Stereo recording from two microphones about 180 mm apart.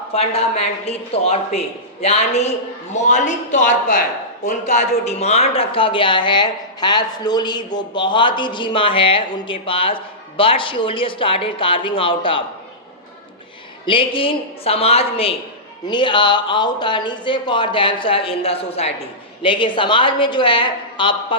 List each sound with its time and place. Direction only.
0.1 s a man's voice: 35° left (ahead or behind)
13.8 s a man's voice: 30° left (ahead or behind)